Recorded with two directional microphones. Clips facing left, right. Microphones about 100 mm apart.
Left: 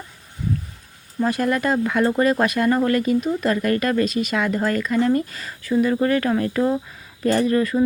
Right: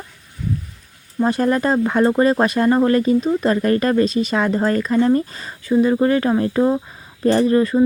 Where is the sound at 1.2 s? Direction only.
30° right (ahead or behind).